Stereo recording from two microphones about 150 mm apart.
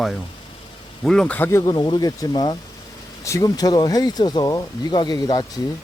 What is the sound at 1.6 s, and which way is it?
Speech, 30° left (ahead or behind).